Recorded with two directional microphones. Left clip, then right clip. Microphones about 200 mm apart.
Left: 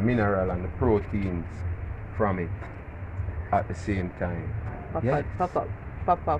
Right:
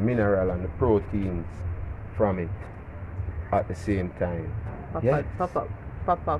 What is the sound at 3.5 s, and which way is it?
Speech, 50° right (ahead or behind).